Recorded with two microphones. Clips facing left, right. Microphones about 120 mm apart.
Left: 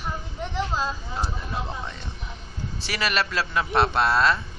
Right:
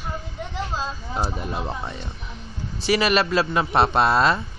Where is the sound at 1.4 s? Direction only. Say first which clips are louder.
Right 3 dB; 20° right (ahead or behind).